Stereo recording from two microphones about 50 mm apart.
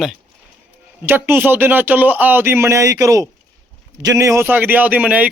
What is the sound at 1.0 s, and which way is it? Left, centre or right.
Speech, right.